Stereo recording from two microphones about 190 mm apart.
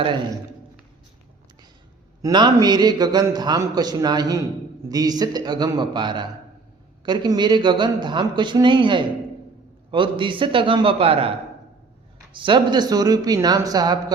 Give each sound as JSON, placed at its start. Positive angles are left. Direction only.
{"t": 2.2, "sound": "a man's voice", "side_deg": -20}